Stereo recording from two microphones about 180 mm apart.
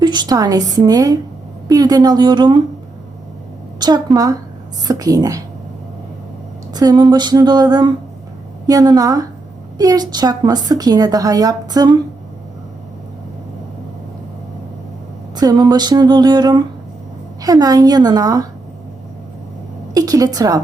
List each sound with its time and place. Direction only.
0.0 s a woman's voice: 25° right (ahead or behind)
3.8 s a woman's voice: 20° right (ahead or behind)
6.7 s a woman's voice: 20° right (ahead or behind)
15.4 s a woman's voice: 20° right (ahead or behind)
19.9 s a woman's voice: 20° right (ahead or behind)